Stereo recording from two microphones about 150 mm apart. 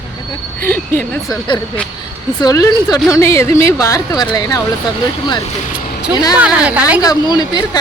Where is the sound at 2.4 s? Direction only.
25° left (ahead or behind).